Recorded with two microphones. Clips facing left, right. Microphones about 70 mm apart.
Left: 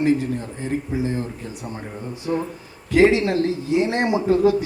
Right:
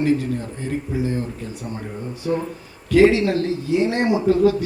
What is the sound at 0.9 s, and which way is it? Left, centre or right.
Speech, left.